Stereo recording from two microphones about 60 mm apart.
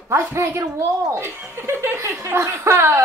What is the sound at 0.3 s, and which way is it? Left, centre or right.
Speech, right.